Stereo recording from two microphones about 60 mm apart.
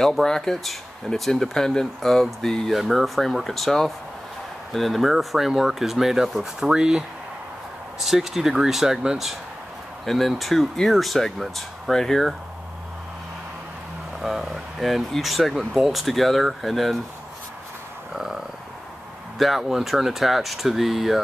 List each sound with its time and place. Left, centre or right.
0.0 s speech: centre
10.0 s speech: centre
11.9 s speech: centre
14.2 s speech: centre
18.1 s frog: centre
19.3 s speech: centre